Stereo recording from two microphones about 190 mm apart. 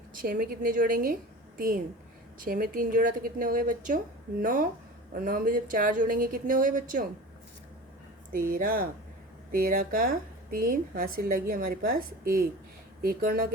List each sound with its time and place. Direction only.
0.1 s a woman's voice: 50° right (ahead or behind)
8.3 s a woman's voice: 50° right (ahead or behind)